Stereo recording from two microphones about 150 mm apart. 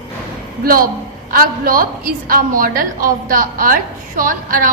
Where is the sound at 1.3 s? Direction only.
70° right (ahead or behind).